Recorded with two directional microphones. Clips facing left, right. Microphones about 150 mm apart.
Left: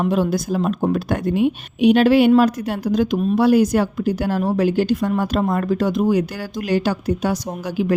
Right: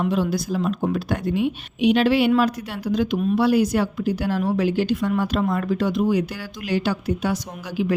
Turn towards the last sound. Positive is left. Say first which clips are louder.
# left 3 dB
turn(degrees=45)  # may be behind; listen again after turning